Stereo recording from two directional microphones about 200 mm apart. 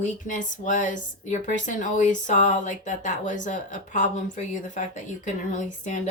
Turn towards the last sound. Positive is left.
turn(degrees=40)  # may be behind; listen again after turning